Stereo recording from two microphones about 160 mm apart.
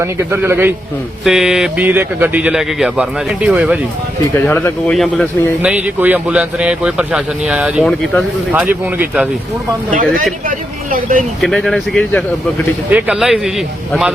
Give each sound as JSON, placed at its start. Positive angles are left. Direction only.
{"t": 0.0, "sound": "speech", "side_deg": -15}
{"t": 4.4, "sound": "speech", "side_deg": 10}
{"t": 8.6, "sound": "speech", "side_deg": -10}
{"t": 11.3, "sound": "speech", "side_deg": 0}
{"t": 12.9, "sound": "speech", "side_deg": -5}